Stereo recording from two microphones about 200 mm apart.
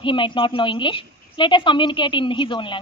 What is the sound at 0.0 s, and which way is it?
A woman's voice, 25° left (ahead or behind).